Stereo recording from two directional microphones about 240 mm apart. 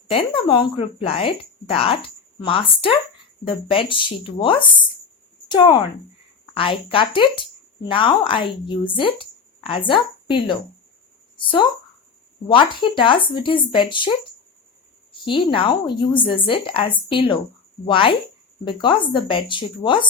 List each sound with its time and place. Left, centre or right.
0.1 s a woman's voice: left
15.1 s a woman's voice: centre